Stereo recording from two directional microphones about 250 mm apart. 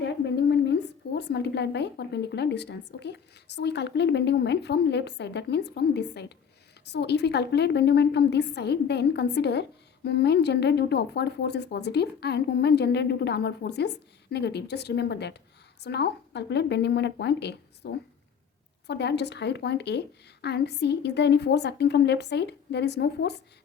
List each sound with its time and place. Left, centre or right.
0.0 s a woman's voice: left